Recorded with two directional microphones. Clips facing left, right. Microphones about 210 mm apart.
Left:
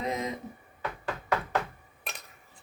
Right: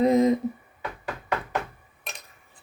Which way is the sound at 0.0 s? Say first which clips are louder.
Right 13 dB; 35° right (ahead or behind).